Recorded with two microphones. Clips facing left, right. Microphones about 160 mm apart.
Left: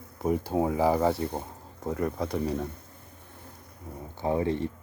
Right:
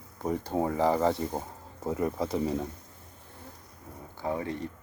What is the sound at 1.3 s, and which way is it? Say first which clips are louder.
Speech: even; 5° right (ahead or behind).